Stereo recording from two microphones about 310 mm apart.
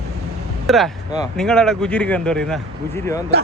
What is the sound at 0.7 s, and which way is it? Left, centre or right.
Speech, centre.